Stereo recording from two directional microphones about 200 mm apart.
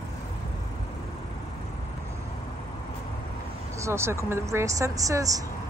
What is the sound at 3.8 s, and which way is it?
A woman's voice, 15° right (ahead or behind).